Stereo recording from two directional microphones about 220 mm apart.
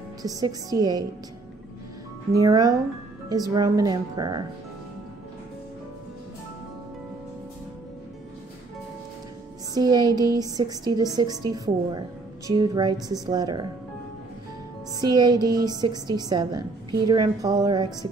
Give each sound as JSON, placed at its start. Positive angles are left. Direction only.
{"t": 0.2, "sound": "a woman's voice", "side_deg": -15}
{"t": 2.3, "sound": "a woman's voice", "side_deg": -15}
{"t": 9.8, "sound": "a woman's voice", "side_deg": -20}
{"t": 15.0, "sound": "a woman's voice", "side_deg": -20}